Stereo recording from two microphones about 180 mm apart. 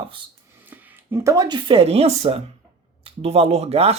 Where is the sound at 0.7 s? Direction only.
10° right (ahead or behind).